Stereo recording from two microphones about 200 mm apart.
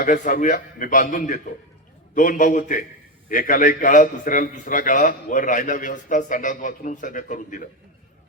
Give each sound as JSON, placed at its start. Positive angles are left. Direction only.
{"t": 0.0, "sound": "a man's voice", "side_deg": 40}